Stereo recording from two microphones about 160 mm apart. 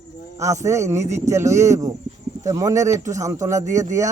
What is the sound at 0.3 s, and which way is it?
Speech, 20° right (ahead or behind).